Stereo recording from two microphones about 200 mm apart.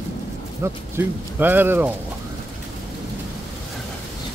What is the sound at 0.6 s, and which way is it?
Speech, 10° right (ahead or behind).